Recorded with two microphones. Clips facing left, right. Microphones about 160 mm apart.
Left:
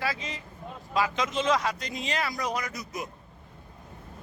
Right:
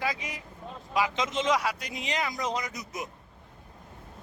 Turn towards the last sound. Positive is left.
turn(degrees=-20)  # may be behind; listen again after turning